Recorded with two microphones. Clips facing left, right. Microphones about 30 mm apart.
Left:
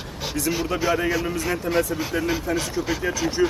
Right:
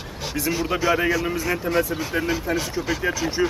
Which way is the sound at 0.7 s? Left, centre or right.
Centre.